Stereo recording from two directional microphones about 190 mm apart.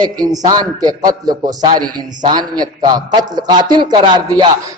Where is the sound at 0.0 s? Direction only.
20° right (ahead or behind).